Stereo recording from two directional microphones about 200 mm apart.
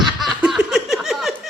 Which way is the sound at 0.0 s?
Centre (ahead or behind).